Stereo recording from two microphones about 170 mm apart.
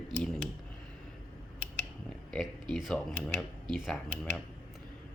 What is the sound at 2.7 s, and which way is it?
Speech, centre (ahead or behind).